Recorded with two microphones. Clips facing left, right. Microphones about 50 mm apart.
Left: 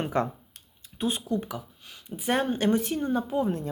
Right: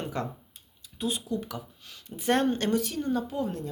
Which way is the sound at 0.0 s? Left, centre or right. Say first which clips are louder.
Left 6 dB; left.